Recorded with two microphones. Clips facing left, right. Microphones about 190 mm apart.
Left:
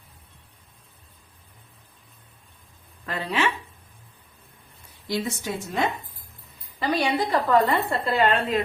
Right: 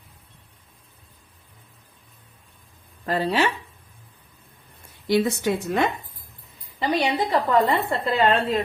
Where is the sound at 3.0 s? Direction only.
35° right (ahead or behind).